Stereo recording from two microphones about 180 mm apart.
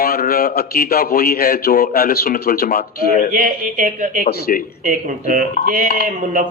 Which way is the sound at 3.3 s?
45° right (ahead or behind).